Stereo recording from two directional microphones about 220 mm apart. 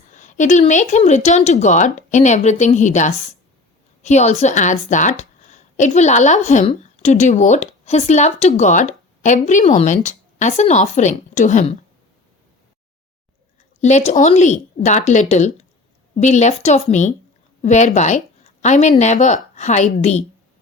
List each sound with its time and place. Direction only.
0.1 s a sound: 35° left (ahead or behind)
0.7 s a woman's voice: 30° left (ahead or behind)
13.8 s a woman's voice: 30° left (ahead or behind)